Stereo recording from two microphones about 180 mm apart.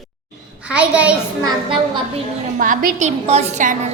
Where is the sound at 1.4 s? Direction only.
25° right (ahead or behind).